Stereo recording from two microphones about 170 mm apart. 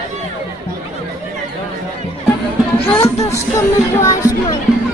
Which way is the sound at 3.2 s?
15° left (ahead or behind).